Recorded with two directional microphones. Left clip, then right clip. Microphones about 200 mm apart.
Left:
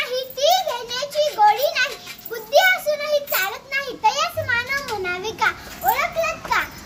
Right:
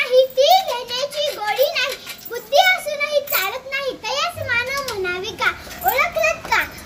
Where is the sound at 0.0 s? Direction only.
20° left (ahead or behind).